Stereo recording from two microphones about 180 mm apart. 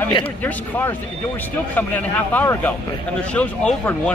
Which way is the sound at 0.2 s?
10° left (ahead or behind).